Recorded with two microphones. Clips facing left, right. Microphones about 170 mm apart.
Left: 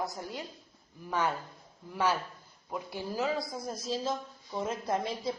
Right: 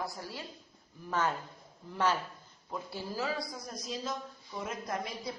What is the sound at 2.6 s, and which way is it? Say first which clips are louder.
Speech: left 2 dB; 15° left (ahead or behind).